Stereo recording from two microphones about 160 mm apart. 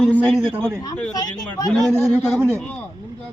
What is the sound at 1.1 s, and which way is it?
Speech, 25° left (ahead or behind).